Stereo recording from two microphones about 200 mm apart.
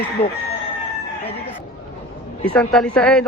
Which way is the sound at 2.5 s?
5° left (ahead or behind).